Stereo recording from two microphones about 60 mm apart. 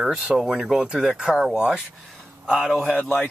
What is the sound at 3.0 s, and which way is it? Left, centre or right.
Speech, left.